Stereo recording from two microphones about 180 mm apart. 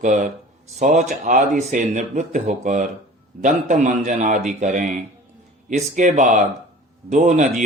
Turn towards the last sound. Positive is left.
turn(degrees=-45)  # may be behind; listen again after turning